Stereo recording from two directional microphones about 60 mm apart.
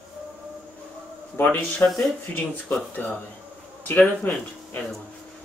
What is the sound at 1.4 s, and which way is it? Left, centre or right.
Speech, left.